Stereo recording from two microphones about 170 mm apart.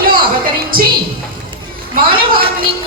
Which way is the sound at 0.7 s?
60° right (ahead or behind).